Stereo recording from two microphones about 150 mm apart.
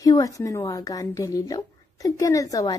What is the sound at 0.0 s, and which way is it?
A woman's voice, 25° left (ahead or behind).